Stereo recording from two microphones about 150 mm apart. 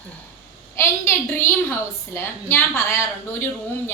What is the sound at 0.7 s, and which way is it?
A woman's voice, 20° left (ahead or behind).